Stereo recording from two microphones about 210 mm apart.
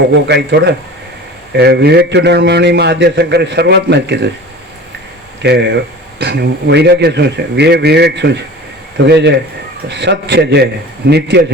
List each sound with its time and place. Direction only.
0.3 s a man's voice: 55° right (ahead or behind)
5.4 s a man's voice: 55° right (ahead or behind)